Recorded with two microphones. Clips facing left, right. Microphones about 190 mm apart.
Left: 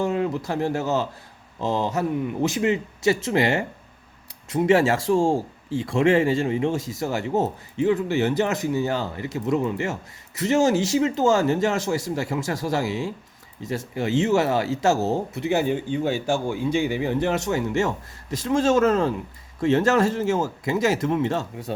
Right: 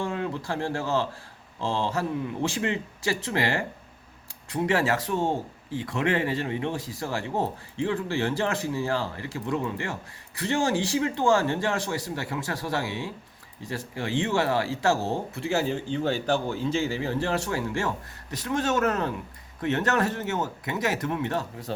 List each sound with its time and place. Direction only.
0.0 s speech: 20° left (ahead or behind)